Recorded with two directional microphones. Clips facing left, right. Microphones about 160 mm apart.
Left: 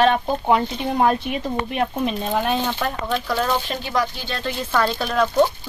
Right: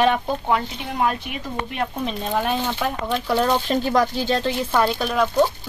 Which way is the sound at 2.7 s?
15° right (ahead or behind).